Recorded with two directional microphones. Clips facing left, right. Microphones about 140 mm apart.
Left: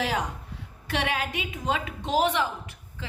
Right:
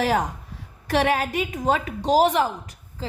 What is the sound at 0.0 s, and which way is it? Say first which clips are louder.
A woman's voice: right 6 dB; 45° right (ahead or behind).